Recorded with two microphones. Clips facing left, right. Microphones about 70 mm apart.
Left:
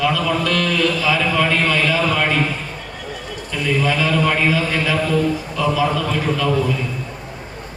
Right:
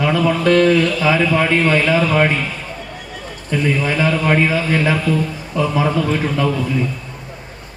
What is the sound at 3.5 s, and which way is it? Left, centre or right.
A man's voice, right.